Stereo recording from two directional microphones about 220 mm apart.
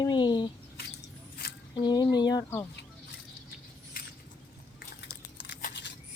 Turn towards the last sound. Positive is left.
turn(degrees=50)  # may be behind; listen again after turning